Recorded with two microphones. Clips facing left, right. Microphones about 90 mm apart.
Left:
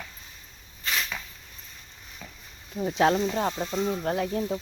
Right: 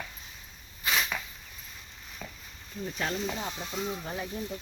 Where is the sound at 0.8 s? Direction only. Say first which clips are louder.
Right 1 dB; 10° right (ahead or behind).